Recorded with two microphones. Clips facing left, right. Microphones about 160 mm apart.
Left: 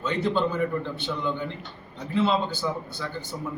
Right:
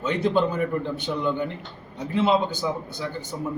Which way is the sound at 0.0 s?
15° right (ahead or behind).